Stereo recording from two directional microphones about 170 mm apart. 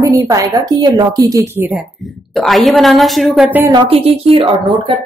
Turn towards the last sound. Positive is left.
turn(degrees=-30)  # may be behind; listen again after turning